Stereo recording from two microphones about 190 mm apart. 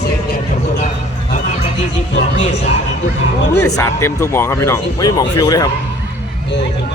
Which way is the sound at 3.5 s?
15° left (ahead or behind).